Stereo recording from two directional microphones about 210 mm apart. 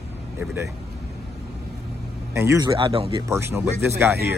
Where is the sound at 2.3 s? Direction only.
10° right (ahead or behind).